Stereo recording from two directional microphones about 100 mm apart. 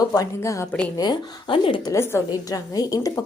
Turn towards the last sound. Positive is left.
turn(degrees=35)  # may be behind; listen again after turning